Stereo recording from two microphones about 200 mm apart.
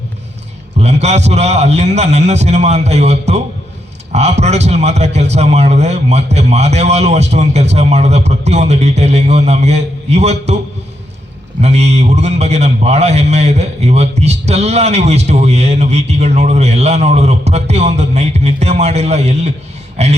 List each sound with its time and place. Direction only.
0.8 s a man's voice: 35° right (ahead or behind)
11.6 s a man's voice: 35° right (ahead or behind)